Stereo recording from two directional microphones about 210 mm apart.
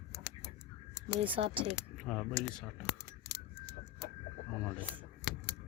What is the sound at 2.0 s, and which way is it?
Speech, centre (ahead or behind).